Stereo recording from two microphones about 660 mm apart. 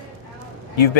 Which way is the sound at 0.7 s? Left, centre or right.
Left.